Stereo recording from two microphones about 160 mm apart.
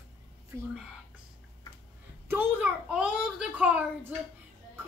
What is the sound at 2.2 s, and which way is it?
A child's voice, 15° right (ahead or behind).